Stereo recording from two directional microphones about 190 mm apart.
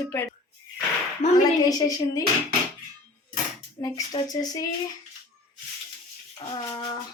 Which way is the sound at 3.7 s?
20° left (ahead or behind).